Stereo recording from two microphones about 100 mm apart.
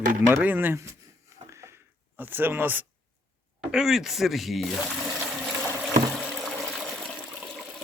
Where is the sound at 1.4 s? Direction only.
30° right (ahead or behind).